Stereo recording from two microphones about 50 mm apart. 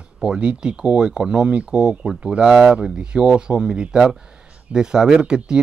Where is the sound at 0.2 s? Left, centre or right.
Centre.